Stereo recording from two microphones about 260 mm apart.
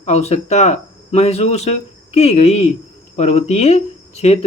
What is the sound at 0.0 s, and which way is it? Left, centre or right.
Speech, left.